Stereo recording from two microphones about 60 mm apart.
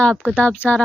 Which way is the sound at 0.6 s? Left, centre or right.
Left.